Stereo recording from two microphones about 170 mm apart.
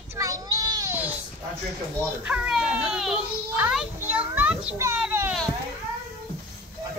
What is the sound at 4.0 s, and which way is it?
Children playing, 10° right (ahead or behind).